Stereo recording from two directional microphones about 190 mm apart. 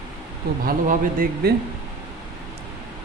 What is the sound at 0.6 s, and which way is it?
Speech, 45° right (ahead or behind).